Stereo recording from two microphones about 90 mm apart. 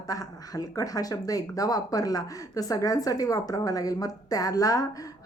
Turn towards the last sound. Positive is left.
turn(degrees=40)  # may be behind; listen again after turning